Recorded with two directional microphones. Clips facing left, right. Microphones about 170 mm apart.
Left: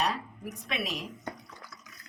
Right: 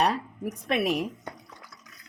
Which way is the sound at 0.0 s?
55° right (ahead or behind).